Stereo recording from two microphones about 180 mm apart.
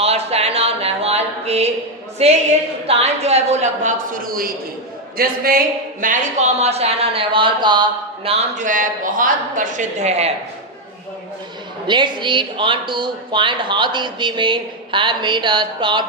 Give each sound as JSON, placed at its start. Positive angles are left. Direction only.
{"t": 0.0, "sound": "a sound", "side_deg": -35}
{"t": 2.2, "sound": "speech", "side_deg": -35}
{"t": 11.9, "sound": "speech", "side_deg": -25}